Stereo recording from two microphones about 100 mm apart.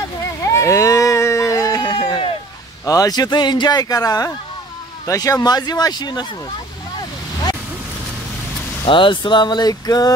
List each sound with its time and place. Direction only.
0.2 s a sound: 30° left (ahead or behind); by 2.3 s 55° left (ahead or behind)
2.8 s speech: 35° left (ahead or behind)
8.8 s speech: 55° left (ahead or behind); by 10.1 s 40° left (ahead or behind)